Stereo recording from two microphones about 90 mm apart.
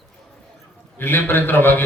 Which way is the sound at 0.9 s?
25° left (ahead or behind).